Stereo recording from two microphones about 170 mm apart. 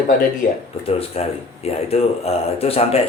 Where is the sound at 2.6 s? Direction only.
35° left (ahead or behind).